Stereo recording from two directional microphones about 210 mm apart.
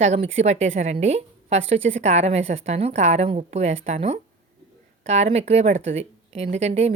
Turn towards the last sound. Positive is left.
turn(degrees=-30)  # may be behind; listen again after turning